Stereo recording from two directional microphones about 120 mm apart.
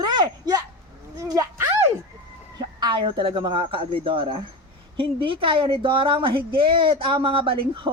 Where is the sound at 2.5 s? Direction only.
40° right (ahead or behind).